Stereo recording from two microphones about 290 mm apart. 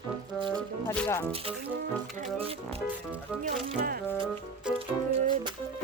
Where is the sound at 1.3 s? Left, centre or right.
Centre.